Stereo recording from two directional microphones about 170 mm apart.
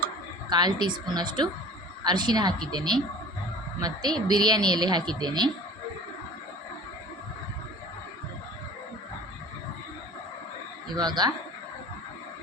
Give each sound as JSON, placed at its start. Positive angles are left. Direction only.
{"t": 0.5, "sound": "speech", "side_deg": -25}
{"t": 10.9, "sound": "speech", "side_deg": -25}